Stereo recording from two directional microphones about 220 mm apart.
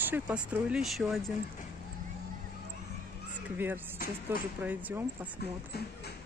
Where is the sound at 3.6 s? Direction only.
10° right (ahead or behind).